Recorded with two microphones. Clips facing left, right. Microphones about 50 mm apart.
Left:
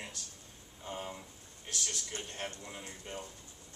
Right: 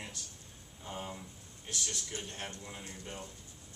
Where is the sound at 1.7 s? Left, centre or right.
Left.